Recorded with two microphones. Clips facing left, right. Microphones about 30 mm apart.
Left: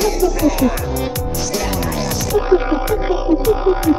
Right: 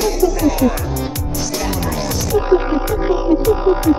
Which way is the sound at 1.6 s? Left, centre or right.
Centre.